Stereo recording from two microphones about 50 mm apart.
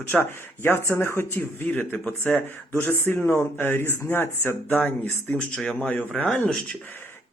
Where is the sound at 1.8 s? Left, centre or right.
Left.